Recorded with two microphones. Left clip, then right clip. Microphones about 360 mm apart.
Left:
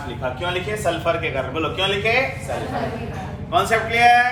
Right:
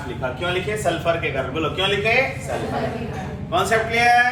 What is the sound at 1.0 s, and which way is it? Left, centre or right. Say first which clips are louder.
A man's voice: even; centre.